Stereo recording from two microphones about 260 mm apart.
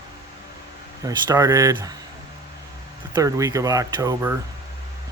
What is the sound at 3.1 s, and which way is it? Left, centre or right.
Speech, centre.